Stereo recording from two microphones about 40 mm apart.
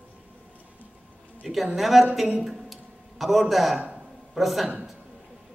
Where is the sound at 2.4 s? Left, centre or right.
Centre.